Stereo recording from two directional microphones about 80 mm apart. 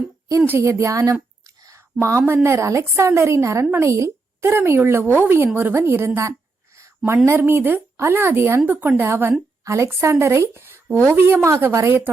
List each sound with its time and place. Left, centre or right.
0.6 s a woman's voice: right